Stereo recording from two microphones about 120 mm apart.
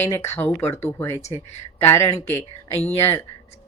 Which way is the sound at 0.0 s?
20° left (ahead or behind).